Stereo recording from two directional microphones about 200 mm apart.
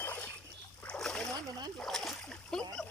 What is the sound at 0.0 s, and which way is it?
Boat, 10° left (ahead or behind).